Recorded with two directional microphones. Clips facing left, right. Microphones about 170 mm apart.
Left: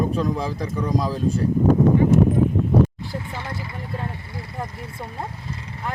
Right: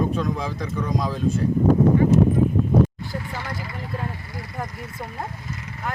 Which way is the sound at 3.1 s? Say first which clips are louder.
Even; 25° left (ahead or behind).